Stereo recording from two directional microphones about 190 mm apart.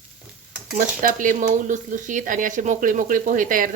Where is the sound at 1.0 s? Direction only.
45° right (ahead or behind).